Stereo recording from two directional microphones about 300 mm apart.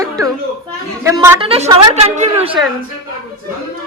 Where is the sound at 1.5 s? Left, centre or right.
Centre.